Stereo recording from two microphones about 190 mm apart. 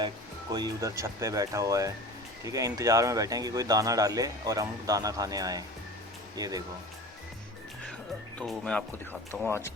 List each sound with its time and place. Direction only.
0.5 s speech: 20° right (ahead or behind)
8.4 s speech: 5° left (ahead or behind)
9.5 s speech: 15° left (ahead or behind)